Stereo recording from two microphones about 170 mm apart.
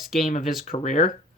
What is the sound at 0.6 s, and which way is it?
Speech, 45° left (ahead or behind).